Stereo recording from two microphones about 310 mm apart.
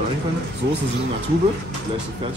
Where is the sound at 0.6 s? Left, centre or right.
Right.